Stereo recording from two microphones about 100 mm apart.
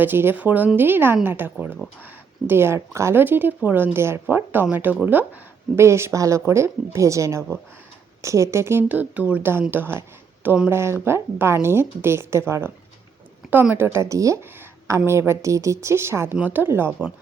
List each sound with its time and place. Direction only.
0.0 s speech: 20° right (ahead or behind)
8.9 s speech: 15° right (ahead or behind)